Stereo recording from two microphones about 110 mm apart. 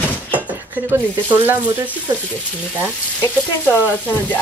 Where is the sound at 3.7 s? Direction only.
15° left (ahead or behind).